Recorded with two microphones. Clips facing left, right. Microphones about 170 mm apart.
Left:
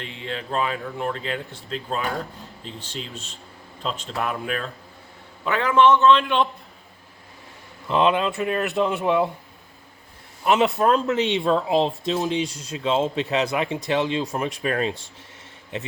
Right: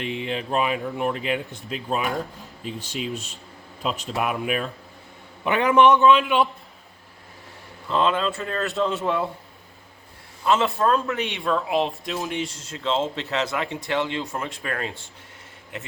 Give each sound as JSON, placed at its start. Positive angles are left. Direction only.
{"t": 0.0, "sound": "speech", "side_deg": -15}
{"t": 7.9, "sound": "speech", "side_deg": 20}
{"t": 10.4, "sound": "speech", "side_deg": 15}
{"t": 12.2, "sound": "speech", "side_deg": 20}